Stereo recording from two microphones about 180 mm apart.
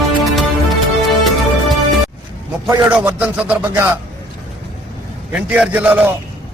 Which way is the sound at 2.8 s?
5° right (ahead or behind).